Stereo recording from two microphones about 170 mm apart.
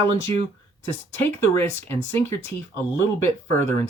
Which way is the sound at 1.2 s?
15° left (ahead or behind).